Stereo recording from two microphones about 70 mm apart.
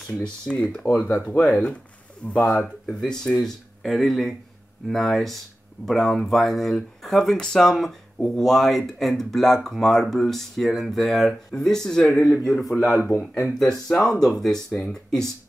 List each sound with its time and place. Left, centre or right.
0.0 s speech: centre